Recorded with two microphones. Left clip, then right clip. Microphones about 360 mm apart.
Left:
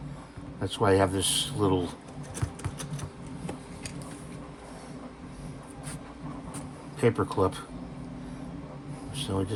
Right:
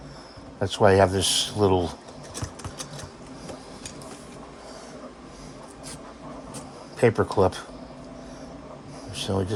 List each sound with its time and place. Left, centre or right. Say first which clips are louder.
0.6 s a man's voice: right 6 dB; right
7.0 s a man's voice: right 5 dB; right
9.1 s a sound: right 5 dB; centre